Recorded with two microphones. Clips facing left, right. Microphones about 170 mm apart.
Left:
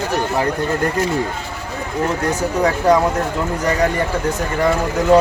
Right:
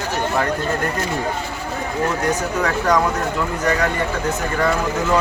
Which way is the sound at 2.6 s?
30° left (ahead or behind).